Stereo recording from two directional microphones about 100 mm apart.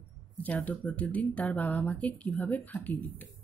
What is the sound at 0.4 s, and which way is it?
A woman's voice, 15° left (ahead or behind).